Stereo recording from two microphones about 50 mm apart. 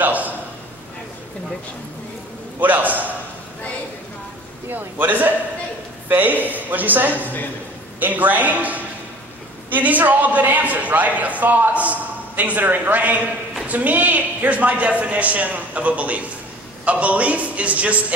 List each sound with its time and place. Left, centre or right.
0.0 s a sound: right
2.6 s a man's voice: right
4.7 s a man's voice: right